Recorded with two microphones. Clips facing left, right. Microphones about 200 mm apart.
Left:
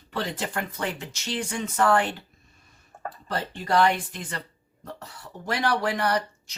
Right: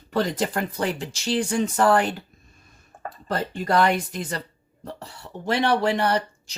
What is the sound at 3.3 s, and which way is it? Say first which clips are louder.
Speech: right 2 dB; 45° right (ahead or behind).